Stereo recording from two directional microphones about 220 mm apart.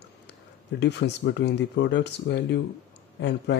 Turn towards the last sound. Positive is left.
turn(degrees=50)  # may be behind; listen again after turning